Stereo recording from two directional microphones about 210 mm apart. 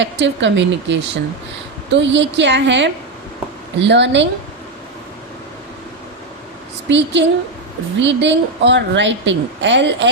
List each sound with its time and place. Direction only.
0.0 s a woman's voice: 60° right (ahead or behind)
6.8 s a woman's voice: 60° right (ahead or behind)